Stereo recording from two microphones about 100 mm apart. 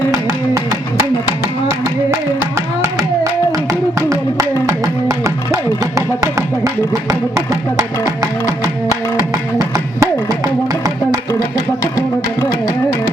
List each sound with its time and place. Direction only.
0.1 s music: 30° right (ahead or behind)
3.7 s a sound: 35° right (ahead or behind)
5.0 s music: 35° right (ahead or behind)
7.8 s music: 40° right (ahead or behind)
9.6 s music: 35° right (ahead or behind)